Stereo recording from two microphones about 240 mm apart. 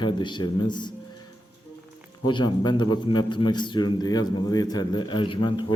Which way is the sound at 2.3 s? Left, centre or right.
Centre.